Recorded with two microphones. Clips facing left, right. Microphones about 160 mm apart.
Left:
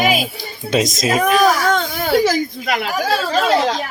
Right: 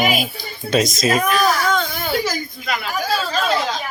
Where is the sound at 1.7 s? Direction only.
70° left (ahead or behind).